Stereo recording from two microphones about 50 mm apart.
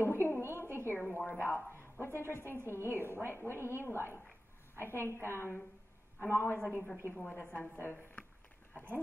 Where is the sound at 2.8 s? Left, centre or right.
Right.